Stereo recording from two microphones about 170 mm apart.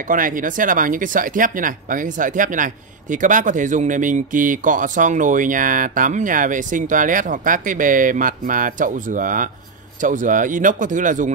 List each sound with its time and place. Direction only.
0.1 s speech: 50° right (ahead or behind)